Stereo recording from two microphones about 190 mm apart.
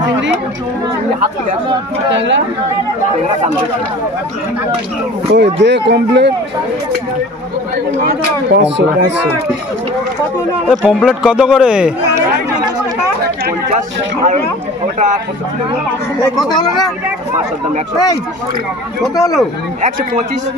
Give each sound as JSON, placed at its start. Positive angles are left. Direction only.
{"t": 2.1, "sound": "speech", "side_deg": -70}
{"t": 5.3, "sound": "speech", "side_deg": -65}
{"t": 8.5, "sound": "speech", "side_deg": -65}
{"t": 10.7, "sound": "a man's voice", "side_deg": 0}
{"t": 13.7, "sound": "a man's voice", "side_deg": -40}